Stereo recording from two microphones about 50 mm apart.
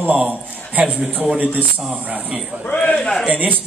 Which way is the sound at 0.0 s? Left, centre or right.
Right.